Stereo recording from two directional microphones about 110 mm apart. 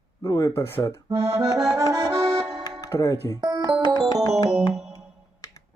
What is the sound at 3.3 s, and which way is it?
Music, 40° right (ahead or behind).